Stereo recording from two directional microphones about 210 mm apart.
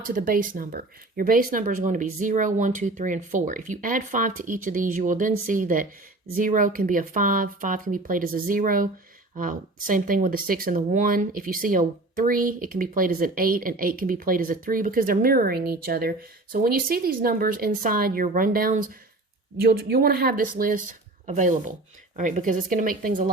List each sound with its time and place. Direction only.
0.0 s speech: 40° right (ahead or behind)